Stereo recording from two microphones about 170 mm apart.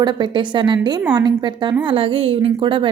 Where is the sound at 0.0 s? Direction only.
25° right (ahead or behind).